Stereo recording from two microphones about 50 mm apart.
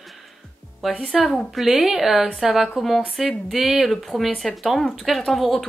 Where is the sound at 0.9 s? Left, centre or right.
Centre.